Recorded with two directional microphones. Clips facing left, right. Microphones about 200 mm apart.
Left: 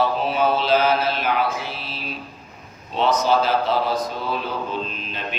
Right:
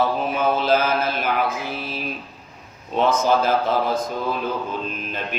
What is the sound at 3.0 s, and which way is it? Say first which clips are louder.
Mantra: right 1 dB; 50° right (ahead or behind).